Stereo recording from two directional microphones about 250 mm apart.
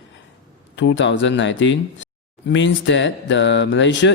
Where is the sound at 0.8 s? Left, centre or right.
Left.